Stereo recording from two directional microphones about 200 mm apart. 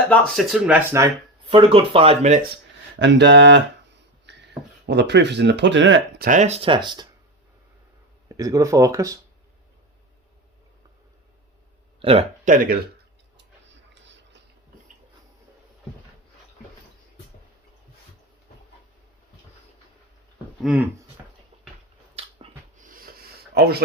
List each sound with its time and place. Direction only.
0.1 s speech: centre (ahead or behind)
1.5 s speech: 30° right (ahead or behind)
3.0 s speech: 60° right (ahead or behind)
4.3 s a sound: 60° right (ahead or behind)
4.9 s speech: 60° right (ahead or behind)
6.2 s speech: 40° right (ahead or behind); by 7.1 s 20° right (ahead or behind)
8.3 s speech: 15° right (ahead or behind)
11.9 s speech: 30° right (ahead or behind)
12.5 s speech: 45° right (ahead or behind)
13.3 s tick-tock: 65° right (ahead or behind)
20.6 s speech: centre (ahead or behind)
22.1 s a sound: 30° right (ahead or behind)
22.8 s a sound: 45° right (ahead or behind)